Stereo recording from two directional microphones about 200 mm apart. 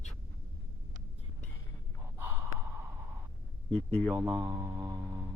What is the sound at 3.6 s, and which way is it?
Speech, 5° left (ahead or behind).